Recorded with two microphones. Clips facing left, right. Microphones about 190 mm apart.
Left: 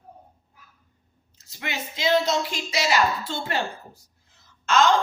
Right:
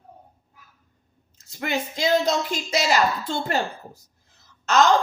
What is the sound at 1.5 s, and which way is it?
A woman's voice, 50° right (ahead or behind).